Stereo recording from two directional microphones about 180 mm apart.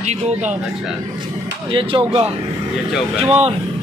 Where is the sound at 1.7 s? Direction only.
30° right (ahead or behind).